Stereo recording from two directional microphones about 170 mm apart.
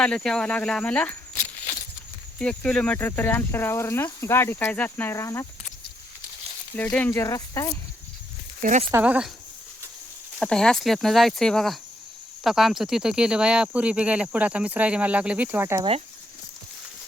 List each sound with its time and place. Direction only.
0.0 s speech: 5° left (ahead or behind)
2.4 s speech: 5° left (ahead or behind)
6.9 s speech: 10° left (ahead or behind)
8.9 s speech: 10° right (ahead or behind)
10.4 s speech: 5° left (ahead or behind); by 15.8 s 10° right (ahead or behind)